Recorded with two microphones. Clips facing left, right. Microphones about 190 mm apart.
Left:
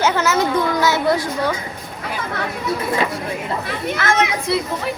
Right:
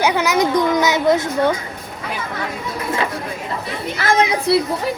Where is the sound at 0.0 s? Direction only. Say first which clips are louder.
Right 1 dB; 15° right (ahead or behind).